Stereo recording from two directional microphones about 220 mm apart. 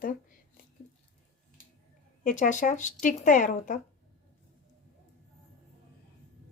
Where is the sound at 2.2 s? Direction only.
35° left (ahead or behind).